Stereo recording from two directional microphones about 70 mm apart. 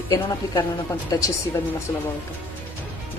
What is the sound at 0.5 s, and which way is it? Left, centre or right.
Speech, left.